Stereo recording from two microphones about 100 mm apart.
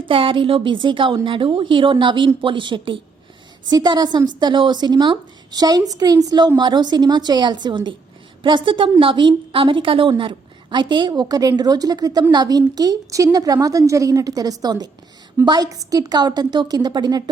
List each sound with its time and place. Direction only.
0.1 s a woman's voice: 60° right (ahead or behind)
11.2 s a woman's voice: 40° right (ahead or behind)